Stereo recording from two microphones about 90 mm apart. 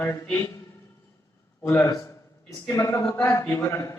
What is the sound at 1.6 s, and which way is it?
Speech, 25° left (ahead or behind).